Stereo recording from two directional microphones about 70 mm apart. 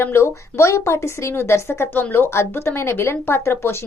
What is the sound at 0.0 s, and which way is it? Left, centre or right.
A woman's voice, left.